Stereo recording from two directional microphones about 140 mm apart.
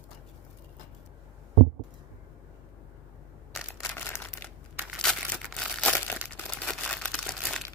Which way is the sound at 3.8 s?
20° left (ahead or behind).